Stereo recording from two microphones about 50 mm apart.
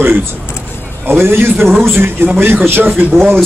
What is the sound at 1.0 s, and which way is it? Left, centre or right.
A man's voice, right.